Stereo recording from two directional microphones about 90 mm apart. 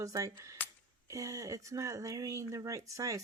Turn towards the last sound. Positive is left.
turn(degrees=-40)  # may be behind; listen again after turning